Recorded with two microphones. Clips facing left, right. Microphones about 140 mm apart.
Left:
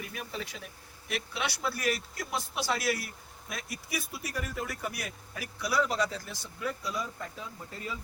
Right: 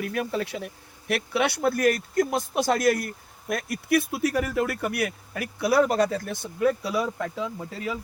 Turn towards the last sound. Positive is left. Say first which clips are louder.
# right 9 dB
turn(degrees=-90)